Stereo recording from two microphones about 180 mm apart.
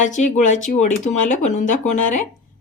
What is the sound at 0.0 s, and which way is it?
A woman's voice, 40° left (ahead or behind).